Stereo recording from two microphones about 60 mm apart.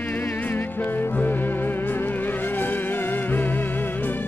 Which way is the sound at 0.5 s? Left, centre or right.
Left.